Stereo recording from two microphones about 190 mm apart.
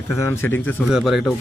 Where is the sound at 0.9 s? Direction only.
Centre (ahead or behind).